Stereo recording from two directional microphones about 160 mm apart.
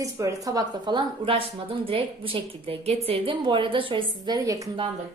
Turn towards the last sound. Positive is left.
turn(degrees=-30)  # may be behind; listen again after turning